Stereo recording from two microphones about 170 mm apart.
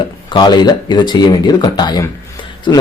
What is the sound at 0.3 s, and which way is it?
Speech, 25° left (ahead or behind).